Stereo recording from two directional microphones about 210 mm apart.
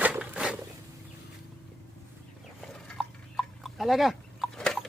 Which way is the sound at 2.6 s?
Centre (ahead or behind).